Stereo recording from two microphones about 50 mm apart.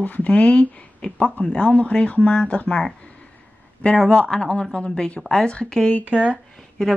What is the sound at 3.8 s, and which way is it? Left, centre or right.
A man's voice, centre.